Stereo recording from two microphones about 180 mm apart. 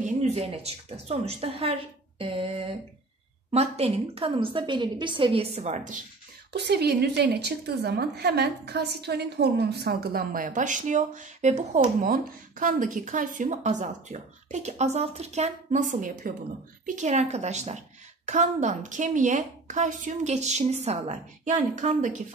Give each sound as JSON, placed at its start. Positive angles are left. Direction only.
{"t": 0.0, "sound": "a woman's voice", "side_deg": -35}
{"t": 6.5, "sound": "a woman's voice", "side_deg": -65}